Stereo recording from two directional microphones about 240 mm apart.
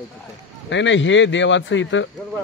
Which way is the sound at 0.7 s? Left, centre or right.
Left.